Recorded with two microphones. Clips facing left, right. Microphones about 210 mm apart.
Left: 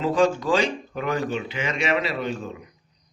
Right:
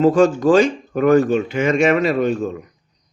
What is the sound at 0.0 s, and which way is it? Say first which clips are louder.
Speech: right 8 dB; 45° right (ahead or behind).